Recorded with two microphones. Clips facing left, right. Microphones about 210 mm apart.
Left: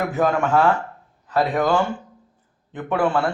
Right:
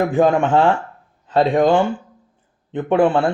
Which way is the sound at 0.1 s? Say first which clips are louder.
Right 5 dB; 30° right (ahead or behind).